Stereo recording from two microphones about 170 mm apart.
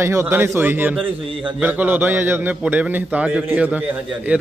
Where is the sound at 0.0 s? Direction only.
15° right (ahead or behind).